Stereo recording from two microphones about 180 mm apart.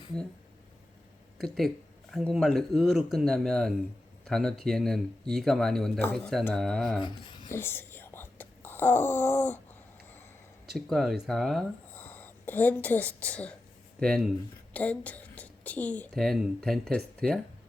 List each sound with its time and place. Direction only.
1.5 s speech: centre (ahead or behind)
7.0 s speech: 25° left (ahead or behind)
7.5 s whispering: 10° left (ahead or behind)
10.7 s a woman's voice: centre (ahead or behind)